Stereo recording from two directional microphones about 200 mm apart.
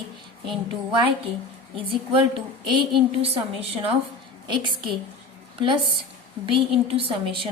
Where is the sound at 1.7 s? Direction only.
25° right (ahead or behind).